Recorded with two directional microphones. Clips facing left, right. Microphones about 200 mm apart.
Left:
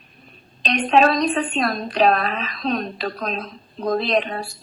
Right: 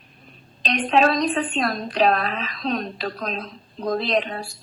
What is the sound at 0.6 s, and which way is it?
A woman's voice, 50° left (ahead or behind).